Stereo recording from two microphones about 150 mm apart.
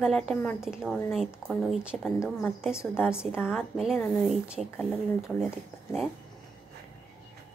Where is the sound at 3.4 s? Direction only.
5° right (ahead or behind).